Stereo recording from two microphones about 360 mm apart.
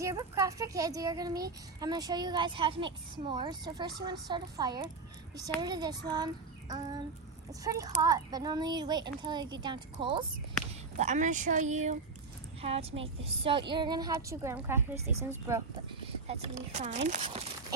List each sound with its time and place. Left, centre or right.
0.0 s a child's voice: centre
16.2 s a child's voice: centre